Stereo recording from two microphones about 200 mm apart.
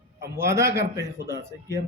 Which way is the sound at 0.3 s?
15° right (ahead or behind).